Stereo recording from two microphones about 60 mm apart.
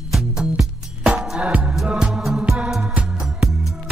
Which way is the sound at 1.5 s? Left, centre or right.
Centre.